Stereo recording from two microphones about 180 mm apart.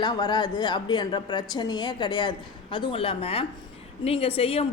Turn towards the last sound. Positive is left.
turn(degrees=35)  # may be behind; listen again after turning